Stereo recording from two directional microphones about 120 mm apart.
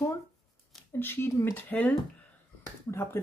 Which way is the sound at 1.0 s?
20° left (ahead or behind).